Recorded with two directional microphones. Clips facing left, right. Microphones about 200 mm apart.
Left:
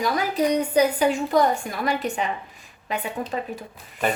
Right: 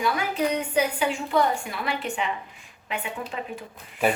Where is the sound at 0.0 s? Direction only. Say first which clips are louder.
Left 3 dB; 40° left (ahead or behind).